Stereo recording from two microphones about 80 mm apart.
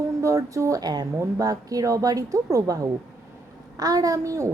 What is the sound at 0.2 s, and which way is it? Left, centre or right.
A woman's voice, right.